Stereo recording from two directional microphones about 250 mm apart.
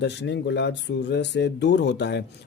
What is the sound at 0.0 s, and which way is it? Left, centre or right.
A man's voice, left.